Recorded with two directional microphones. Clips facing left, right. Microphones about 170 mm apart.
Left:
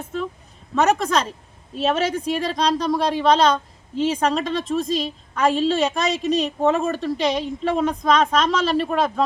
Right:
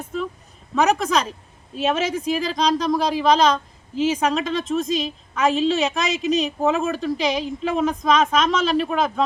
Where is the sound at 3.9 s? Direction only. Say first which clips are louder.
Right 1 dB; 30° left (ahead or behind).